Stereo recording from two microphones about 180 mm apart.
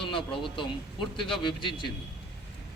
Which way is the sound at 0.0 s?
30° left (ahead or behind).